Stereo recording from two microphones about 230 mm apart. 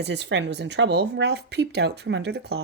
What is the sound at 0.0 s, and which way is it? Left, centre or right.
Speech, right.